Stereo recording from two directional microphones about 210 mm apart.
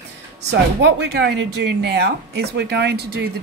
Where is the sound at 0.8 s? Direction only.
55° right (ahead or behind).